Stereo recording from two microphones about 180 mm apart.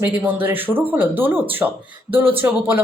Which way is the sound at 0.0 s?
10° right (ahead or behind).